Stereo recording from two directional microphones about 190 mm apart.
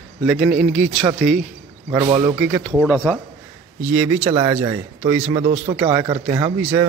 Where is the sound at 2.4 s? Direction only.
Centre (ahead or behind).